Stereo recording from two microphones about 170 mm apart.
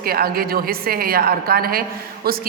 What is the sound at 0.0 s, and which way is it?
A woman's voice, 60° right (ahead or behind).